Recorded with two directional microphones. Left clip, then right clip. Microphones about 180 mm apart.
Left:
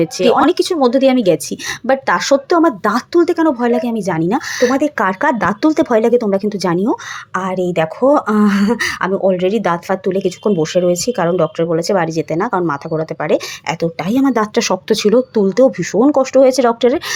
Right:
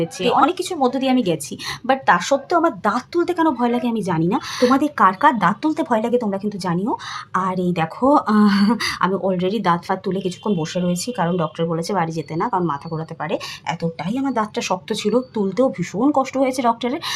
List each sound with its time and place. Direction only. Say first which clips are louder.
0.0 s a woman's voice: left 5 dB; 30° left (ahead or behind)